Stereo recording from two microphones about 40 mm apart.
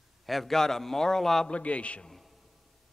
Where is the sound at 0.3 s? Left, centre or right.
Centre.